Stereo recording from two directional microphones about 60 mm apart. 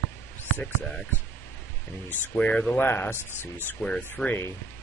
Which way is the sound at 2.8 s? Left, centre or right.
Left.